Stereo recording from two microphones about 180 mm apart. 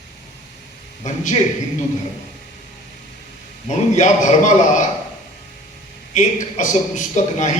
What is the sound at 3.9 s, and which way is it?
Speech, 40° left (ahead or behind).